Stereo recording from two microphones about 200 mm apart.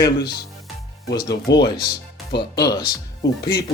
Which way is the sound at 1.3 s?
60° left (ahead or behind).